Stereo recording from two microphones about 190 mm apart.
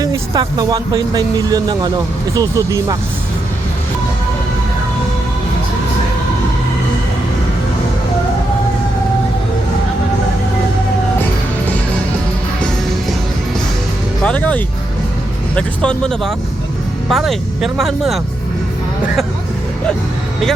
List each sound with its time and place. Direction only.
0.0 s speech: 20° right (ahead or behind)
14.2 s speech: 5° left (ahead or behind)